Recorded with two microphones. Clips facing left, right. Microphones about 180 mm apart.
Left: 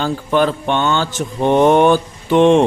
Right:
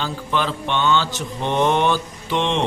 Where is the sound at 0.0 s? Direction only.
50° left (ahead or behind).